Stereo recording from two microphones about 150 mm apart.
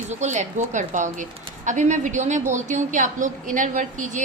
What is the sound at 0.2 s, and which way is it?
A woman's voice, 50° right (ahead or behind).